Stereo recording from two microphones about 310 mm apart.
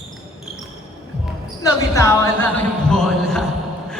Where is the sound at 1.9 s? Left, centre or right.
Centre.